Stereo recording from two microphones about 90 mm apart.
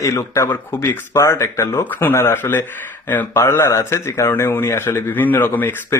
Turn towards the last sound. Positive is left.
turn(degrees=25)  # may be behind; listen again after turning